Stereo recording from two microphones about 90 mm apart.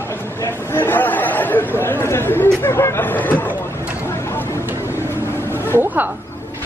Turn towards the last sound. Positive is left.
turn(degrees=-20)  # may be behind; listen again after turning